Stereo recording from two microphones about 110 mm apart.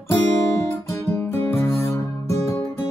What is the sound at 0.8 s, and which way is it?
Music, 20° left (ahead or behind).